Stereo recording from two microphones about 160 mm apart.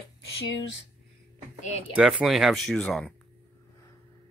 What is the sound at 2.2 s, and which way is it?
Speech, centre (ahead or behind).